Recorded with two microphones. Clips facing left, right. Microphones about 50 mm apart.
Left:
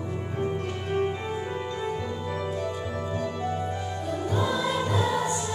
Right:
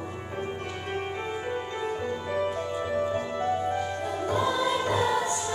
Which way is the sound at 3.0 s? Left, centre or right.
Right.